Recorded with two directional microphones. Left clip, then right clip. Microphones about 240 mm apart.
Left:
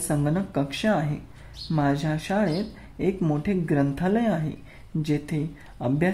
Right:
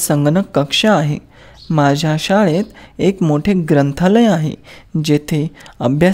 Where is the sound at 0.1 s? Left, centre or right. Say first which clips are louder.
Right 12 dB; right.